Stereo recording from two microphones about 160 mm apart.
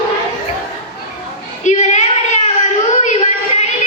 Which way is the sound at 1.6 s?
50° left (ahead or behind).